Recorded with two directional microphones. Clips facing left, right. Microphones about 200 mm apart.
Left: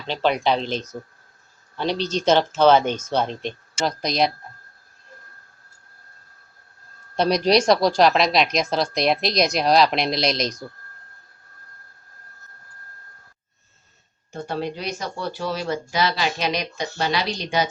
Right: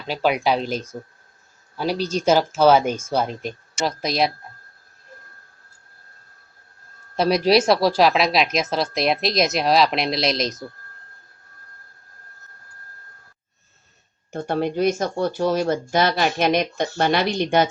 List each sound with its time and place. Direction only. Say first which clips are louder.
0.0 s speech: right 1 dB; 5° right (ahead or behind)
7.2 s speech: right 1 dB; 5° right (ahead or behind)
14.3 s speech: right 4 dB; 55° right (ahead or behind)